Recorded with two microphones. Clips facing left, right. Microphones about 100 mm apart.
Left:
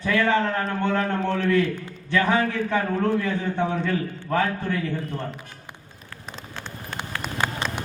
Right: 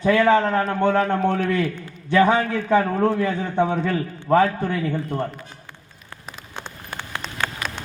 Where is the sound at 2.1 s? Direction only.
25° right (ahead or behind).